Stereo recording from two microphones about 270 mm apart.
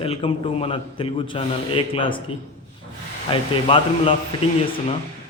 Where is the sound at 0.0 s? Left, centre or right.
Left.